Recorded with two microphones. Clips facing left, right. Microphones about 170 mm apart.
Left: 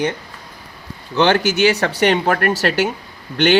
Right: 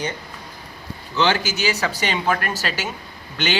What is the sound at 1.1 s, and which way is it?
Speech, 55° left (ahead or behind).